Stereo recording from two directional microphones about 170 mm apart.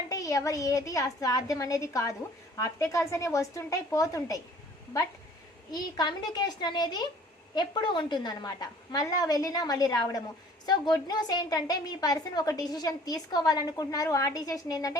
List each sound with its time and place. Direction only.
0.1 s a woman's voice: 20° left (ahead or behind)
5.7 s a woman's voice: 25° left (ahead or behind)